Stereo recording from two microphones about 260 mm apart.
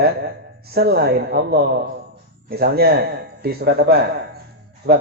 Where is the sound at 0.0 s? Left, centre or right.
Right.